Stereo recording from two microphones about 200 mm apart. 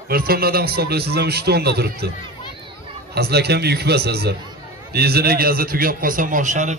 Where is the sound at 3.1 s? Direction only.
55° right (ahead or behind); by 6.7 s 40° right (ahead or behind).